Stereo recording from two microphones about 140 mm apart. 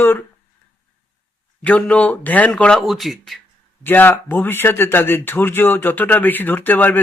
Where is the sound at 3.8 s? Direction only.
15° left (ahead or behind).